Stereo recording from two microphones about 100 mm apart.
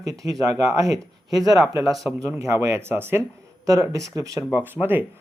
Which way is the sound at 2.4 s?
30° right (ahead or behind).